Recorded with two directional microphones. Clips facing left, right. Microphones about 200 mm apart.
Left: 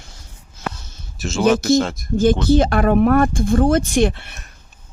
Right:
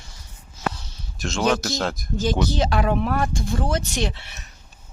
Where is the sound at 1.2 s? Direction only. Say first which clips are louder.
Left 5 dB; 5° left (ahead or behind).